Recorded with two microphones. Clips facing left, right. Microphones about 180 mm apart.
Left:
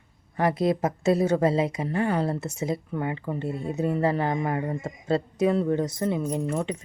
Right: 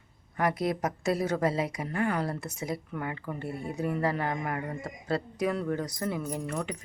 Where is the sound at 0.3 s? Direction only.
25° left (ahead or behind).